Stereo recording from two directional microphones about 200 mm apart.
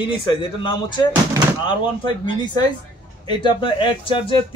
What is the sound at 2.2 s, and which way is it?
A man's voice, 20° left (ahead or behind).